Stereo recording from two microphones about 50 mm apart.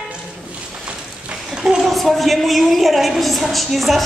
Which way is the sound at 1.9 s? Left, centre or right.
Centre.